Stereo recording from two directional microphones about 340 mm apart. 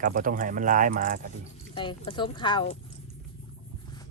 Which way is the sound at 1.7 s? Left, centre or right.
Centre.